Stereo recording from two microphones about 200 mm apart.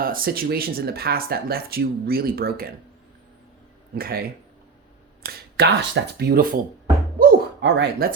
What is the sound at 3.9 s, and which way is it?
Speech, 50° right (ahead or behind).